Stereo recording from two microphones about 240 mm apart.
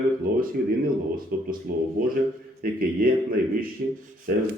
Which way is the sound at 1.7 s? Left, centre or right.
Right.